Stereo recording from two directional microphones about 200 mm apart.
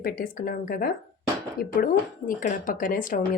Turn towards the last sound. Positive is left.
turn(degrees=40)  # may be behind; listen again after turning